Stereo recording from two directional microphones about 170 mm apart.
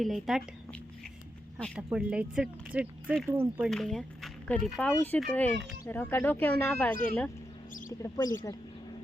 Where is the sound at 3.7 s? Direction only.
Centre (ahead or behind); by 8.3 s 20° left (ahead or behind).